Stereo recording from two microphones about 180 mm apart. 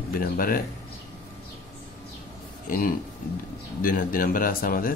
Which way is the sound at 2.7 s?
50° left (ahead or behind).